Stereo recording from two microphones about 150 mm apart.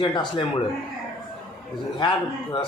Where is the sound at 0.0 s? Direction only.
30° left (ahead or behind).